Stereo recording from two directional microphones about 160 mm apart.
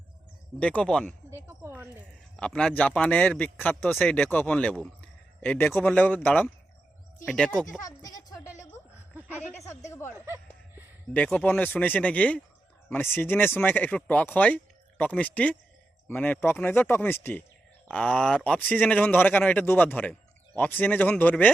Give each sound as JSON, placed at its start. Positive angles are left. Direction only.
{"t": 0.6, "sound": "speech", "side_deg": 5}
{"t": 1.5, "sound": "a sound", "side_deg": -15}
{"t": 2.3, "sound": "a man's voice", "side_deg": 5}
{"t": 7.9, "sound": "music", "side_deg": 20}
{"t": 9.1, "sound": "a sound", "side_deg": -10}
{"t": 9.9, "sound": "a man's voice", "side_deg": 15}